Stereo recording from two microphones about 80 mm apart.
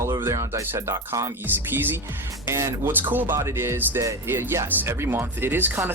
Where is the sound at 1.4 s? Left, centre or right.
Right.